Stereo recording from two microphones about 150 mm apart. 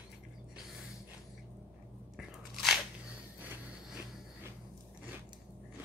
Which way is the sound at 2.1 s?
Centre (ahead or behind).